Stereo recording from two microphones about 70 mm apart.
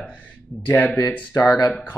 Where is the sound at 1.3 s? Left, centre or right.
Left.